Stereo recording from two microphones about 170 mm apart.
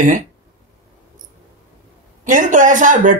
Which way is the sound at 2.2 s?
50° right (ahead or behind).